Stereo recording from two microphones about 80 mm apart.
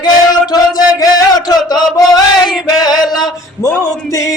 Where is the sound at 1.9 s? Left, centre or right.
Left.